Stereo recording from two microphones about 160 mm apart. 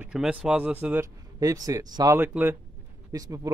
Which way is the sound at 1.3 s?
20° right (ahead or behind).